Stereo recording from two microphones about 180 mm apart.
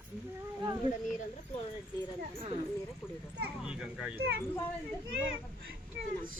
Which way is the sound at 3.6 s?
5° right (ahead or behind).